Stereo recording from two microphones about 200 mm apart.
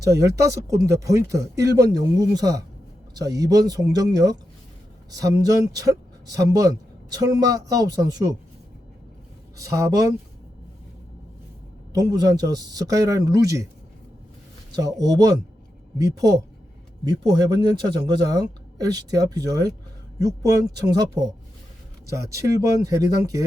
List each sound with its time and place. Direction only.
0.0 s speech: 15° right (ahead or behind)
9.6 s speech: 15° right (ahead or behind)
11.9 s speech: 20° right (ahead or behind)
14.8 s speech: 20° right (ahead or behind)
17.1 s speech: 20° right (ahead or behind)
22.3 s speech: 15° right (ahead or behind)